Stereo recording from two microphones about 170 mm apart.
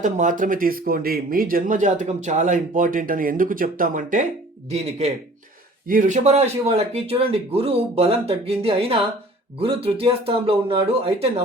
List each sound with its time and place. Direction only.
0.0 s speech: 50° right (ahead or behind)
4.7 s speech: 40° right (ahead or behind)